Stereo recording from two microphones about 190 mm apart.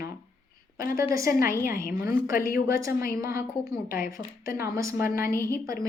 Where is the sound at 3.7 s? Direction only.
50° left (ahead or behind).